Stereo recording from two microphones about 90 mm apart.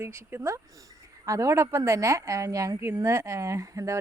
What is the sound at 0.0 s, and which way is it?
A woman's voice, 30° right (ahead or behind).